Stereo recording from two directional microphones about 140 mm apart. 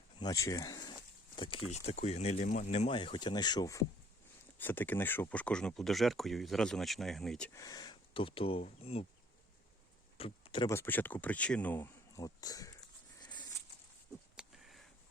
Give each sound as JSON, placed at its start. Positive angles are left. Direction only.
{"t": 0.2, "sound": "speech", "side_deg": 25}
{"t": 1.4, "sound": "speech", "side_deg": 40}
{"t": 1.7, "sound": "speech", "side_deg": 50}
{"t": 4.5, "sound": "speech", "side_deg": 15}
{"t": 7.5, "sound": "speech", "side_deg": 25}
{"t": 10.2, "sound": "a sound", "side_deg": 45}
{"t": 10.7, "sound": "speech", "side_deg": 15}
{"t": 12.1, "sound": "speech", "side_deg": 25}
{"t": 13.2, "sound": "a sound", "side_deg": 30}
{"t": 14.3, "sound": "a sound", "side_deg": 0}